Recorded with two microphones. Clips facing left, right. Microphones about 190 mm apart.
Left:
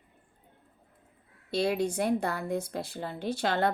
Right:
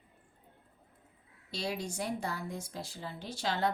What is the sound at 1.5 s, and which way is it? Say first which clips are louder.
Speech: left 9 dB; 60° left (ahead or behind).